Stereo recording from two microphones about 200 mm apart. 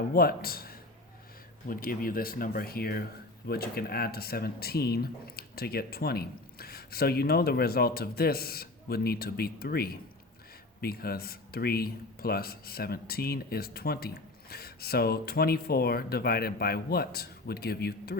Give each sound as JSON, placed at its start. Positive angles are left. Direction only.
{"t": 0.1, "sound": "a man's voice", "side_deg": 50}